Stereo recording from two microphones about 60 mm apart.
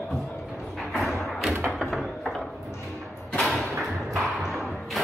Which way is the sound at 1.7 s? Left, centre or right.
Centre.